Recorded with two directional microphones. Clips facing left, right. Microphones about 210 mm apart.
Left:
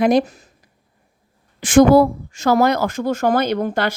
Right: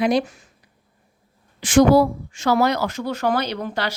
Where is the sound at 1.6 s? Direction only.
50° left (ahead or behind).